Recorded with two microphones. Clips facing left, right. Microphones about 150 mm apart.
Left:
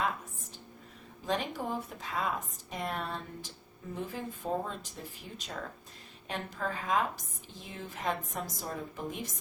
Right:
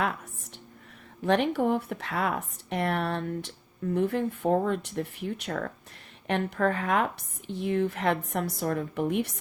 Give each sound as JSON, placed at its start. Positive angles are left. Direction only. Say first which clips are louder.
{"t": 1.2, "sound": "speech", "louder": "right 9 dB", "side_deg": -65}